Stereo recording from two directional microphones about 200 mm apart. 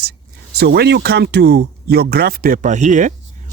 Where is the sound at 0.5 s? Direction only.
55° right (ahead or behind).